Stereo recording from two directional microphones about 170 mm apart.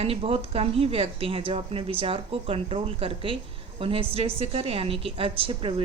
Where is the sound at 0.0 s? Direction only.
35° right (ahead or behind).